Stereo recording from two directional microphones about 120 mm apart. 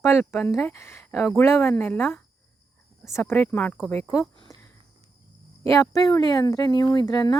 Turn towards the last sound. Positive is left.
turn(degrees=35)  # may be behind; listen again after turning